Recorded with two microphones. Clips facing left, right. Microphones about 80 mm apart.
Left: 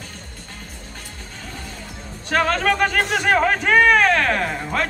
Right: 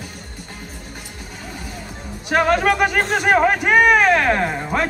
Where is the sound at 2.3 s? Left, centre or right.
Centre.